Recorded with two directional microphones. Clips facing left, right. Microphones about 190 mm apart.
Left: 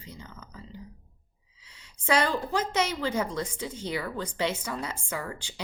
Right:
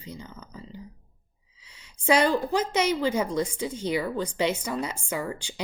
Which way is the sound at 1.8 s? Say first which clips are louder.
Right 4 dB; 15° right (ahead or behind).